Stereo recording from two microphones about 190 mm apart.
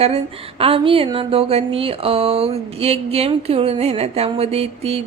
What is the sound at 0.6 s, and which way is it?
Speech, 30° right (ahead or behind).